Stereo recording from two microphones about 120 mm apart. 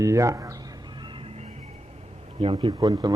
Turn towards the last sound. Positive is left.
turn(degrees=-35)  # may be behind; listen again after turning